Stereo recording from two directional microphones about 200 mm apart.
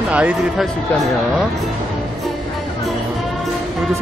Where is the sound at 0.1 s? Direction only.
5° right (ahead or behind).